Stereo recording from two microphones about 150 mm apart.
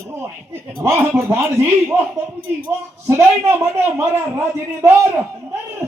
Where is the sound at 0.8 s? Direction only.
20° right (ahead or behind).